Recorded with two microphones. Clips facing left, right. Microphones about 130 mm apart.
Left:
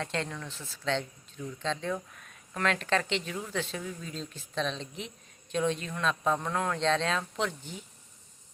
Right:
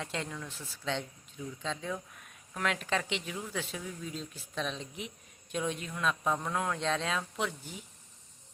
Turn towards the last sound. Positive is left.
turn(degrees=-10)  # may be behind; listen again after turning